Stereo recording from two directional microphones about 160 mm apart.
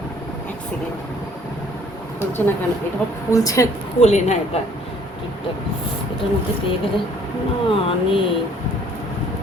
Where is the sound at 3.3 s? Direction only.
20° left (ahead or behind).